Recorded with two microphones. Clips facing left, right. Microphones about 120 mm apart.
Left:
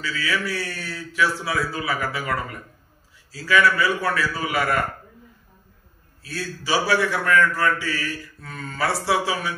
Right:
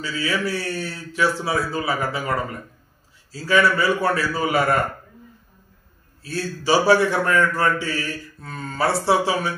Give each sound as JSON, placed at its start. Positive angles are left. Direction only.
{"t": 0.0, "sound": "a man's voice", "side_deg": -25}
{"t": 6.2, "sound": "a man's voice", "side_deg": -30}